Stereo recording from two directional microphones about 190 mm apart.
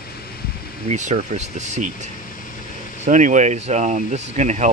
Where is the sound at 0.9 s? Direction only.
40° right (ahead or behind).